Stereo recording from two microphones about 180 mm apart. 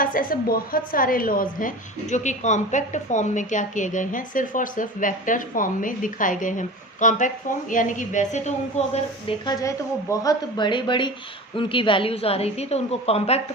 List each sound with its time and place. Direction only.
0.0 s a woman's voice: 50° left (ahead or behind)
9.5 s a woman's voice: 20° left (ahead or behind); by 13.4 s 35° left (ahead or behind)